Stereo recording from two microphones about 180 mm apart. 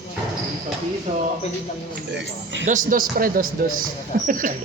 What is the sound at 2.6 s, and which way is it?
Speech, 50° right (ahead or behind).